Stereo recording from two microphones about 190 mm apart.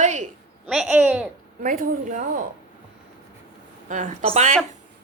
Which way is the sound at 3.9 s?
40° right (ahead or behind).